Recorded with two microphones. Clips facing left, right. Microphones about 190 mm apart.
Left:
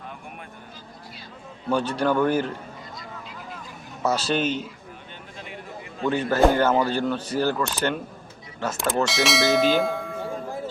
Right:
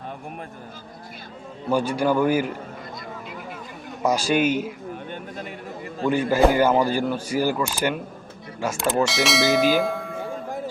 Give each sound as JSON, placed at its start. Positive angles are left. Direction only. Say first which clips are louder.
{"t": 1.7, "sound": "speech", "louder": "right 2 dB", "side_deg": -10}
{"t": 4.0, "sound": "speech", "louder": "right 3 dB", "side_deg": -10}
{"t": 5.1, "sound": "a sound", "louder": "right 6 dB", "side_deg": -45}
{"t": 6.1, "sound": "speech", "louder": "right 1 dB", "side_deg": -10}
{"t": 8.6, "sound": "bell", "louder": "right 2 dB", "side_deg": -5}